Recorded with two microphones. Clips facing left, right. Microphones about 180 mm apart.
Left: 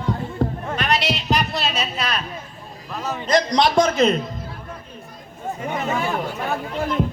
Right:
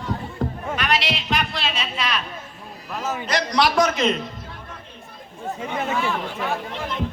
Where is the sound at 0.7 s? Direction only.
35° left (ahead or behind).